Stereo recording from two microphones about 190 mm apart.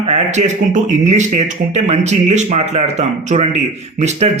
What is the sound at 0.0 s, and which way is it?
Speech, 35° right (ahead or behind).